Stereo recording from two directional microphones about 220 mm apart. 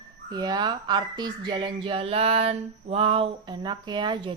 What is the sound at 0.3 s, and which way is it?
Speech, 20° right (ahead or behind).